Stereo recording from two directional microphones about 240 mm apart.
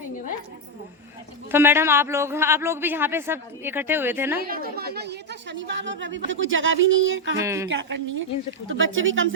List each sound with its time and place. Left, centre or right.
1.5 s a man's voice: centre
4.4 s speech: right
7.4 s a man's voice: centre
7.7 s speech: right